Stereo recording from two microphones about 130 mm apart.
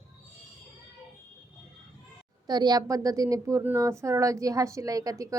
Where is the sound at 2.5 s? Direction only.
30° right (ahead or behind).